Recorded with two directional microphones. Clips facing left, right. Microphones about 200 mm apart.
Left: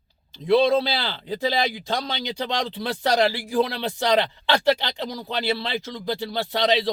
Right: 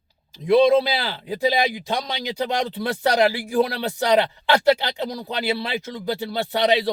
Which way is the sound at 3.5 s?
10° right (ahead or behind).